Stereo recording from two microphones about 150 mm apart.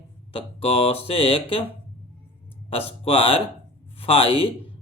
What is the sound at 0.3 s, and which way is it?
Speech, 40° left (ahead or behind).